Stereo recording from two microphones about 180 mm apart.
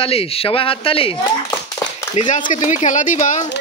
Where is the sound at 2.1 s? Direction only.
40° left (ahead or behind).